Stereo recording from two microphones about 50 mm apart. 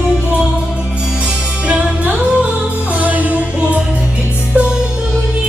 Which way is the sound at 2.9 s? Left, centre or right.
Right.